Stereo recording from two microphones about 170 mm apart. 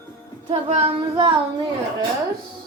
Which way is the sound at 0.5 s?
35° right (ahead or behind).